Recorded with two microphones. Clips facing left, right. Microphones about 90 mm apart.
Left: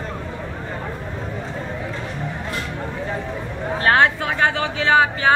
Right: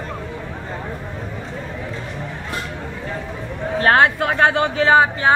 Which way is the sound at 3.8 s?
35° right (ahead or behind).